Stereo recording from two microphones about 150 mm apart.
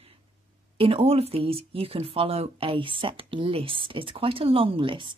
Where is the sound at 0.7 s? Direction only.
40° right (ahead or behind).